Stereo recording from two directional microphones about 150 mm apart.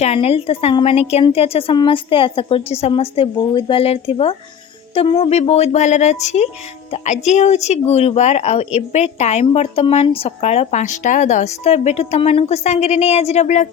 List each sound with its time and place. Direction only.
0.0 s a woman's voice: 45° left (ahead or behind)